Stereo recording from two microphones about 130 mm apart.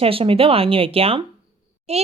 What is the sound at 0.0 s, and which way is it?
A woman's voice, 45° right (ahead or behind).